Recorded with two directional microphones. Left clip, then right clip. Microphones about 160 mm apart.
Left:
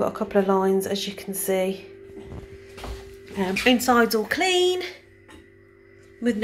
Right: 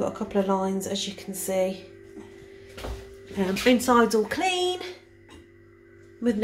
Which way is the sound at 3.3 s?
15° right (ahead or behind).